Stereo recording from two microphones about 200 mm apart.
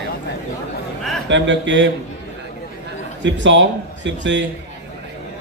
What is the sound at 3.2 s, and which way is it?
A man's voice, 65° right (ahead or behind).